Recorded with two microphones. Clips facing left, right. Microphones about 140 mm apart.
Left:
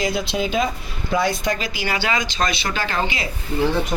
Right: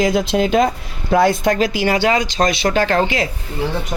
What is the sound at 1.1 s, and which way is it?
Speech, 60° right (ahead or behind).